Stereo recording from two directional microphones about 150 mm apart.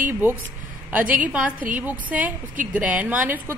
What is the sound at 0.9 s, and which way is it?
A woman's voice, 10° right (ahead or behind).